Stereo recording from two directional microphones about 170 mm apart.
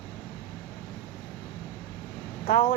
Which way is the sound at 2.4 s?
50° left (ahead or behind).